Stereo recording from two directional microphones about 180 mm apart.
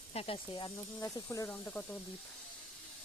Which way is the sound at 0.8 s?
15° left (ahead or behind).